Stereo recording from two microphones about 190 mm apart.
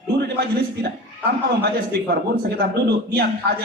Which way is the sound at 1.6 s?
55° right (ahead or behind).